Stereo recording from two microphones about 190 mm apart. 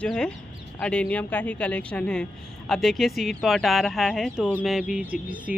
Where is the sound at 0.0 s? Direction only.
5° left (ahead or behind).